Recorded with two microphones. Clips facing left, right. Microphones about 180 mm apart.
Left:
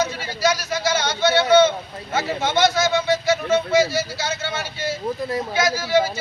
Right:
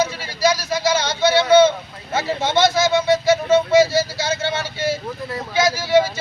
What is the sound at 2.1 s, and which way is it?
Speech, 30° right (ahead or behind).